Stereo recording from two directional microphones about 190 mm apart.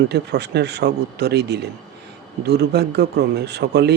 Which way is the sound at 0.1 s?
60° right (ahead or behind).